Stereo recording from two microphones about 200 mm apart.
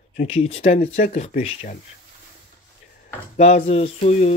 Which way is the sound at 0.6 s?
40° left (ahead or behind).